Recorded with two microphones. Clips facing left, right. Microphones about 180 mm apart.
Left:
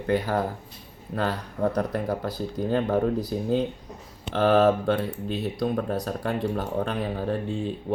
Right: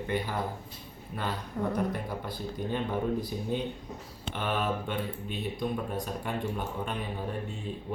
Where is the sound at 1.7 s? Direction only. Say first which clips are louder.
Left 5 dB; 75° left (ahead or behind).